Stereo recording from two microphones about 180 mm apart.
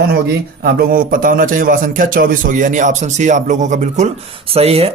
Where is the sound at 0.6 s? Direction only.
55° right (ahead or behind).